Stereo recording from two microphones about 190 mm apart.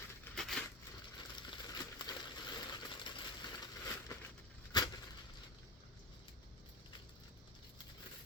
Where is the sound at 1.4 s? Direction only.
20° left (ahead or behind).